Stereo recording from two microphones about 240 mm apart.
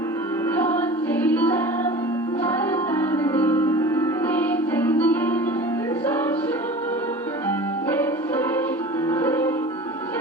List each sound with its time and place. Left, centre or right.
0.5 s music: centre
2.9 s music: centre
9.0 s music: centre